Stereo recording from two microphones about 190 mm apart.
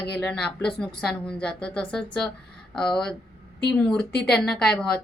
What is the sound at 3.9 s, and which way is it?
A woman's voice, 5° left (ahead or behind).